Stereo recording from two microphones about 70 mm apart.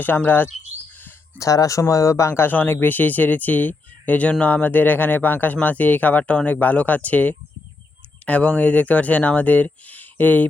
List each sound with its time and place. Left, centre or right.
0.0 s speech: left
1.4 s speech: left